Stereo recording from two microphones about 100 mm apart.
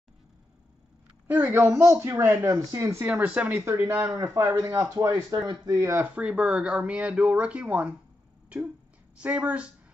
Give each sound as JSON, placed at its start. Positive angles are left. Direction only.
{"t": 1.3, "sound": "speech", "side_deg": -20}
{"t": 3.6, "sound": "speech", "side_deg": -25}
{"t": 5.3, "sound": "speech", "side_deg": -40}
{"t": 6.0, "sound": "speech", "side_deg": -10}
{"t": 9.2, "sound": "speech", "side_deg": -15}